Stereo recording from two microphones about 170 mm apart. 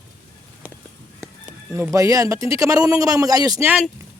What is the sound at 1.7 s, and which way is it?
Speech, 15° right (ahead or behind).